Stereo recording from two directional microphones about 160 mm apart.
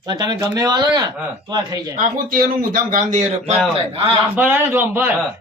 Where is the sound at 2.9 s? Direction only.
50° right (ahead or behind).